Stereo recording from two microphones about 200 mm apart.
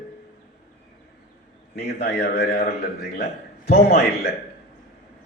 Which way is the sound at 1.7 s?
55° left (ahead or behind).